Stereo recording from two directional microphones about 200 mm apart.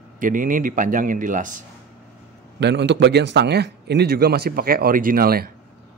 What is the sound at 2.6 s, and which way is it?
A man's voice, 60° right (ahead or behind).